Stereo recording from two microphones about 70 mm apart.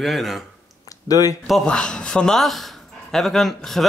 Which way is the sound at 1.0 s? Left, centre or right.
Left.